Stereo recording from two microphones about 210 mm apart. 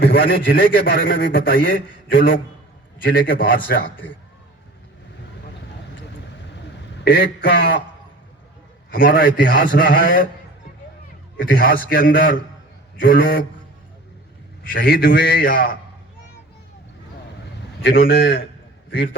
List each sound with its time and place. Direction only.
0.0 s a man's voice: 50° left (ahead or behind)
1.1 s speech: 60° left (ahead or behind)
1.4 s a man's voice: 45° left (ahead or behind)
7.0 s a man's voice: 50° left (ahead or behind)
8.9 s a man's voice: 45° left (ahead or behind)
11.3 s a man's voice: 45° left (ahead or behind)
14.6 s a man's voice: 45° left (ahead or behind)
17.8 s a man's voice: 45° left (ahead or behind)